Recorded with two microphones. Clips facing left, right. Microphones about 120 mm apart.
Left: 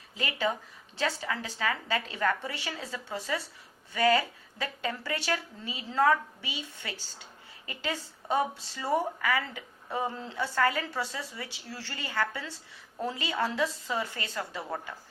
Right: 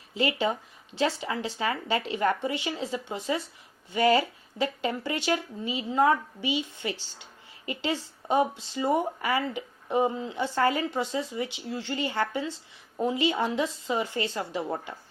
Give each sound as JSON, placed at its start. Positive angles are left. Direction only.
{"t": 0.1, "sound": "a woman's voice", "side_deg": -25}